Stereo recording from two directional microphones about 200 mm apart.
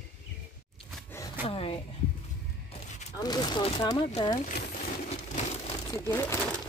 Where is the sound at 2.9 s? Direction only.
35° left (ahead or behind).